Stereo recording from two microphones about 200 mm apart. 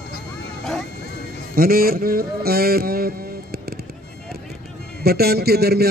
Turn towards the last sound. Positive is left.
turn(degrees=-50)  # may be behind; listen again after turning